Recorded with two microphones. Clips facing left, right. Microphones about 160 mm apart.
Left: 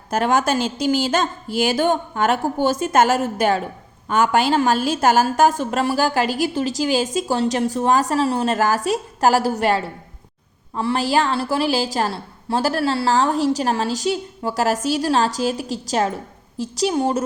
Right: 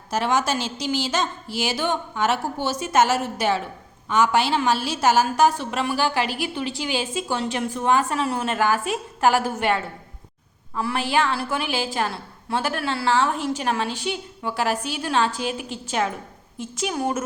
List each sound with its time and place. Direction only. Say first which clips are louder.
0.1 s a woman's voice: left 4 dB; 50° left (ahead or behind); by 17.2 s 30° left (ahead or behind)